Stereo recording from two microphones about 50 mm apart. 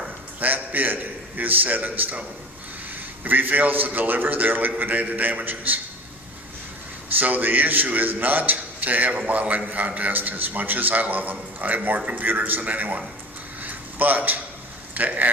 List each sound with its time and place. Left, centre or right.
0.0 s a man's voice: right
7.1 s a man's voice: right
13.6 s a sound: right
14.9 s a man's voice: right